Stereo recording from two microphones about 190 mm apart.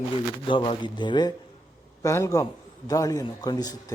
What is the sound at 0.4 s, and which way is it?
A man's voice, 25° left (ahead or behind).